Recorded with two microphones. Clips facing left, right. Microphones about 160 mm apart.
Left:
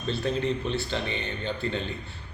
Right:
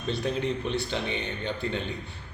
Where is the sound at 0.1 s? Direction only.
15° right (ahead or behind).